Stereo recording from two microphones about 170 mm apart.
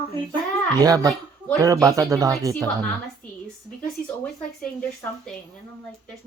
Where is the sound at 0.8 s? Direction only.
20° right (ahead or behind).